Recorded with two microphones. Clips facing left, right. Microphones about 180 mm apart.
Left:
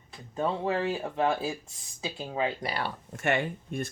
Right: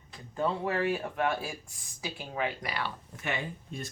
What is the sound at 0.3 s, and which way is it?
Speech, 20° left (ahead or behind).